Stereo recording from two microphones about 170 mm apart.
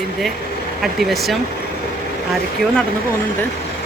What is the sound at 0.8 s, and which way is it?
Speech, centre (ahead or behind).